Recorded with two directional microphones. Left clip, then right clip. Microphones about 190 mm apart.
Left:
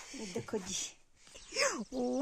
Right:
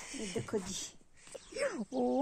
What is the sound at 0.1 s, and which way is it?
Speech, 10° left (ahead or behind).